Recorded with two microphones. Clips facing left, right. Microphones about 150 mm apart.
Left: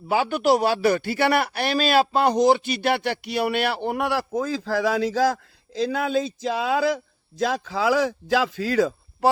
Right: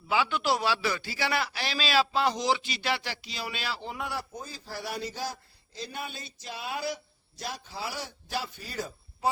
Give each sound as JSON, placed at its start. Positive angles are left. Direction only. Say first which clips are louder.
{"t": 0.1, "sound": "a man's voice", "louder": "left 7 dB", "side_deg": 45}